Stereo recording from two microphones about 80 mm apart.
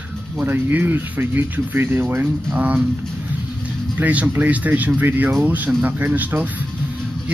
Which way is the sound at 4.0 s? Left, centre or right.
Centre.